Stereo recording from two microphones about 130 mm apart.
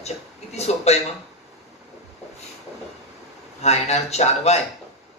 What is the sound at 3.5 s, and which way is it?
Speech, 55° left (ahead or behind).